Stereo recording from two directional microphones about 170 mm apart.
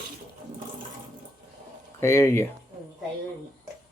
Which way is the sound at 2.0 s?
15° left (ahead or behind).